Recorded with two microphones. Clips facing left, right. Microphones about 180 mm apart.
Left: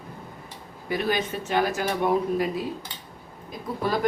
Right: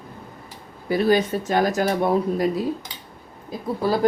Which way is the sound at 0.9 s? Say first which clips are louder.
Right 7 dB; 35° right (ahead or behind).